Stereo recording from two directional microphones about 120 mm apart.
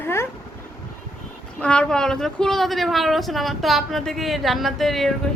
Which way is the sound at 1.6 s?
10° left (ahead or behind).